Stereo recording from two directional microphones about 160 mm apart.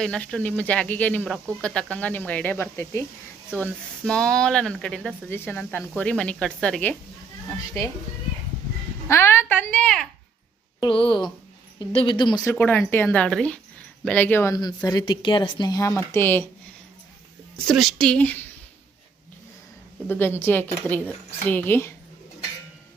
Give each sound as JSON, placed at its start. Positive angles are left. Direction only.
{"t": 0.0, "sound": "a woman's voice", "side_deg": 5}
{"t": 9.0, "sound": "a woman's voice", "side_deg": 15}
{"t": 10.8, "sound": "a woman's voice", "side_deg": 30}
{"t": 17.7, "sound": "speech", "side_deg": 0}
{"t": 20.1, "sound": "a woman's voice", "side_deg": 15}